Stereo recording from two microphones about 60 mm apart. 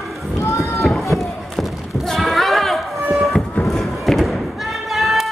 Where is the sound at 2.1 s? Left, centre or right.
Centre.